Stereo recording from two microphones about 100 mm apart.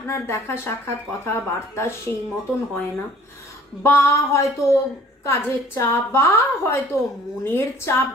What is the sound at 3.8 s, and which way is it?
A woman's voice, 25° left (ahead or behind).